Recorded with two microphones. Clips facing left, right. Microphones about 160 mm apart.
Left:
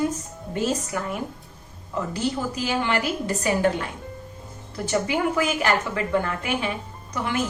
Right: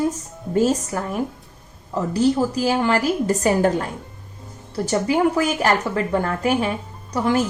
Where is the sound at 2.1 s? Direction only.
35° right (ahead or behind).